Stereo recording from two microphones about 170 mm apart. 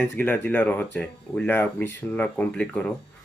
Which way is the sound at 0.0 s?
10° left (ahead or behind).